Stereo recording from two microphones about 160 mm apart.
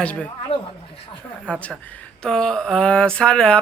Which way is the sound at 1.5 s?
10° left (ahead or behind).